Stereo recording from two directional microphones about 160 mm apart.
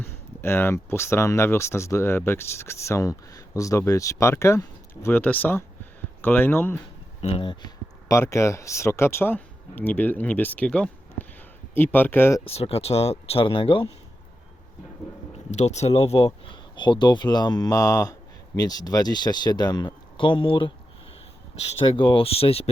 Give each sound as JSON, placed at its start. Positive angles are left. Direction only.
{"t": 0.0, "sound": "speech", "side_deg": 15}
{"t": 7.2, "sound": "speech", "side_deg": 35}
{"t": 8.1, "sound": "speech", "side_deg": 15}
{"t": 12.5, "sound": "speech", "side_deg": 40}
{"t": 15.5, "sound": "speech", "side_deg": 45}
{"t": 21.8, "sound": "speech", "side_deg": 30}